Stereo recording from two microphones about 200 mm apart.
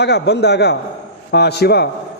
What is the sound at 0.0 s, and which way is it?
Speech, 55° left (ahead or behind).